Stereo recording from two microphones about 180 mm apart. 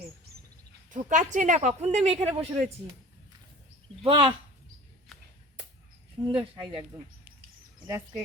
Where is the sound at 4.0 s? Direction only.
30° right (ahead or behind).